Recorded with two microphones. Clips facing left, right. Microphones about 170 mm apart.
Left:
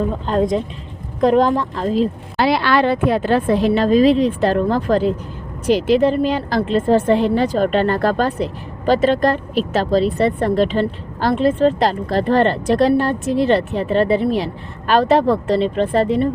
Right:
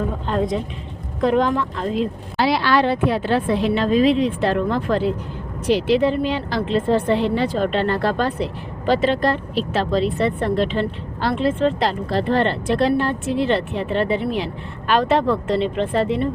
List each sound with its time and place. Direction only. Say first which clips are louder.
1.2 s speech: left 4 dB; 40° left (ahead or behind)
2.4 s a woman's voice: left 2 dB; 55° left (ahead or behind); by 16.3 s 40° left (ahead or behind)